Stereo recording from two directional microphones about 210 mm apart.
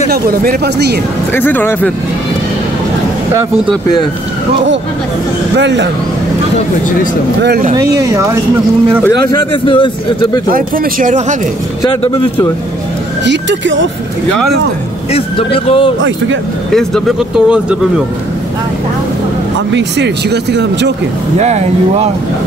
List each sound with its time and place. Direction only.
0.1 s speech: 45° right (ahead or behind)
1.3 s speech: 10° left (ahead or behind)
5.6 s speech: 55° right (ahead or behind)
7.4 s speech: 45° right (ahead or behind)
7.7 s speech: 15° right (ahead or behind)
9.3 s speech: 25° left (ahead or behind)
10.5 s speech: 40° right (ahead or behind)
13.2 s speech: 60° right (ahead or behind)
15.1 s speech: 25° left (ahead or behind)
17.5 s speech: 5° right (ahead or behind)
19.7 s speech: 55° right (ahead or behind)
21.4 s speech: 30° right (ahead or behind)